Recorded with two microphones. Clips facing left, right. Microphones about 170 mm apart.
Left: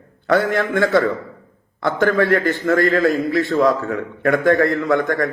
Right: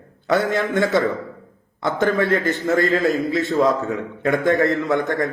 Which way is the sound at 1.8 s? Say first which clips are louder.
Left 2 dB; 20° right (ahead or behind).